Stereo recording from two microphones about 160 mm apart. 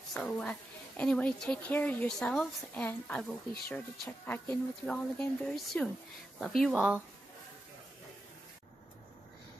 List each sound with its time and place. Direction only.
0.1 s a woman's voice: 5° left (ahead or behind)